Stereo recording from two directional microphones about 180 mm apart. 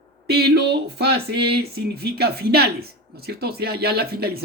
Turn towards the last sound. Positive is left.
turn(degrees=-60)  # may be behind; listen again after turning